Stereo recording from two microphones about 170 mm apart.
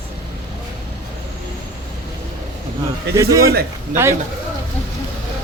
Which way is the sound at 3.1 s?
20° right (ahead or behind).